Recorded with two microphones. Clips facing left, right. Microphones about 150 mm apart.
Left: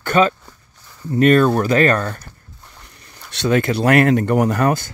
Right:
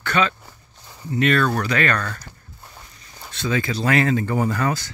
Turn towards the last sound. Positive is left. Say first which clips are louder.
# left 5 dB
turn(degrees=60)  # may be behind; listen again after turning